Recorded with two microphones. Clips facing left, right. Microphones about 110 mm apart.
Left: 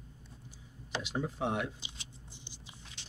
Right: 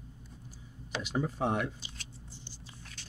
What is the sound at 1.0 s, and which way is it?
Speech, 45° right (ahead or behind).